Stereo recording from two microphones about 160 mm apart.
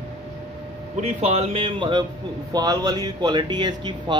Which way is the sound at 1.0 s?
40° right (ahead or behind).